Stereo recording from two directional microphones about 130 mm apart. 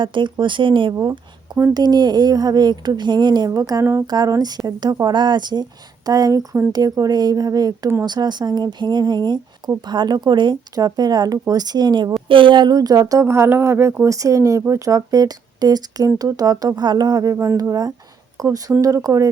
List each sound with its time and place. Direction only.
0.0 s speech: 40° right (ahead or behind)
0.9 s speech: 25° right (ahead or behind)